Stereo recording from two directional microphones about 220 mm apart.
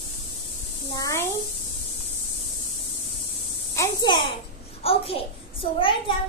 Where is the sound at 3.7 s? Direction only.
15° left (ahead or behind).